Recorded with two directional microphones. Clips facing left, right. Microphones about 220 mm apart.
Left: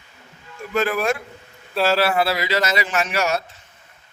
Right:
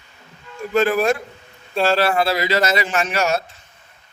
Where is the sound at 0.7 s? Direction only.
30° right (ahead or behind).